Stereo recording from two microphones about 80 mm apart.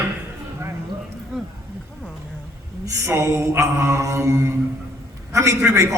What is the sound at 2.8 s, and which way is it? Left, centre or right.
A man's voice, right.